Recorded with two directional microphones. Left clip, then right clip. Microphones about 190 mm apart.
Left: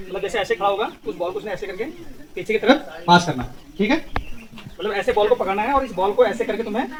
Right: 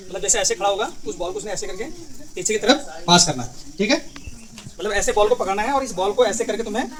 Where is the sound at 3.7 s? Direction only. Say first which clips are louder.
Even; 5° left (ahead or behind).